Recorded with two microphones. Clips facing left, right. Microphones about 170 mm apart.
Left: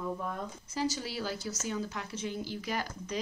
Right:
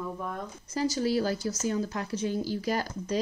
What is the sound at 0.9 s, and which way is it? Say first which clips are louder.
Speech: right 10 dB; 45° right (ahead or behind).